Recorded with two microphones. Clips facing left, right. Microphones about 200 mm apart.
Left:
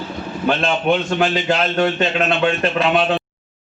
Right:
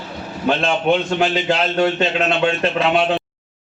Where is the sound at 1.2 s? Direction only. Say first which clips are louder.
Even; 25° right (ahead or behind).